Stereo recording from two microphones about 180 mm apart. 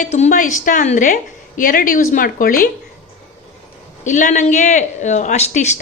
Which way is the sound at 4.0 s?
45° left (ahead or behind).